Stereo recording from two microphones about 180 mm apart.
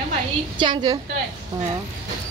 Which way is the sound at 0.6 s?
25° right (ahead or behind).